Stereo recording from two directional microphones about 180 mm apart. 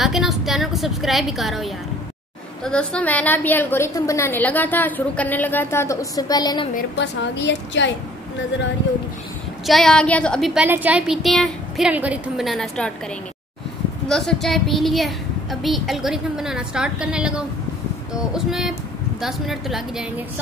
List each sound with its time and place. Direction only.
0.0 s a woman's voice: centre (ahead or behind); by 6.7 s 25° left (ahead or behind)
7.0 s a woman's voice: 85° left
9.7 s speech: centre (ahead or behind)
14.0 s speech: centre (ahead or behind)